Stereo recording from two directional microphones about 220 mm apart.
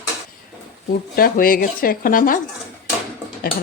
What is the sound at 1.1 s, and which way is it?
Speech, 40° left (ahead or behind).